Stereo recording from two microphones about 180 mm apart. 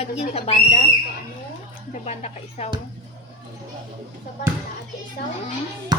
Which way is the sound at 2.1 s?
40° left (ahead or behind).